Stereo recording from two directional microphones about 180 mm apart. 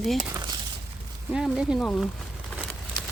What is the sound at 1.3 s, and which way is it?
Speech, 5° right (ahead or behind).